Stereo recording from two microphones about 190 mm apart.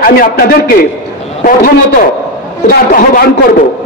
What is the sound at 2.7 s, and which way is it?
Speech, 45° left (ahead or behind).